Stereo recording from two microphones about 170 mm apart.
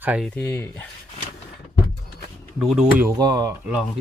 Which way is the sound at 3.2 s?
20° right (ahead or behind).